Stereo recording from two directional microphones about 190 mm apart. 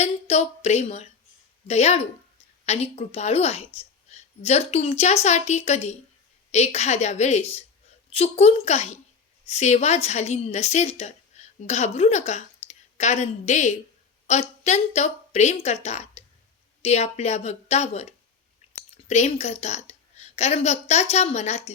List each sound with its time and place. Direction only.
0.0 s a woman's voice: 35° left (ahead or behind)